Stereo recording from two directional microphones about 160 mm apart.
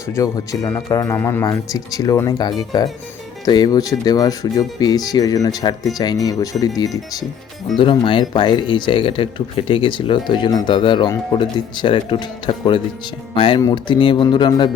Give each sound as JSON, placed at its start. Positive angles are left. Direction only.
{"t": 0.1, "sound": "speech", "side_deg": 20}